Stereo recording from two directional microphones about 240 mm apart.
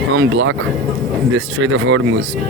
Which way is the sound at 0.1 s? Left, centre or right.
Right.